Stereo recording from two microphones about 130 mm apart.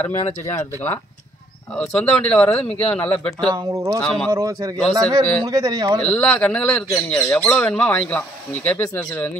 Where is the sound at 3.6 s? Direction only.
25° right (ahead or behind).